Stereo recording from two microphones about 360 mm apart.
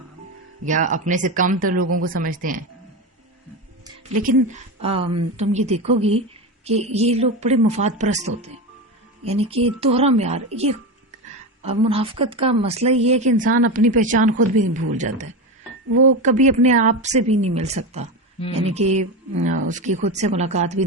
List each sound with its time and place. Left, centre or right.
0.6 s speech: right
4.8 s speech: centre
13.4 s a woman's voice: right
13.7 s speech: right
15.9 s a woman's voice: right
16.2 s speech: centre